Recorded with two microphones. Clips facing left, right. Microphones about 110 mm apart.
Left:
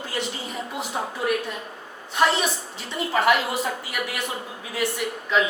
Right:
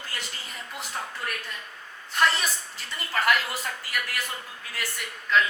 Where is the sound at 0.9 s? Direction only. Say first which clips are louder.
Left 10 dB; 15° left (ahead or behind).